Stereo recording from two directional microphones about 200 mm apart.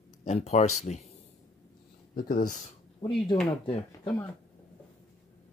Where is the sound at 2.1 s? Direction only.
45° left (ahead or behind).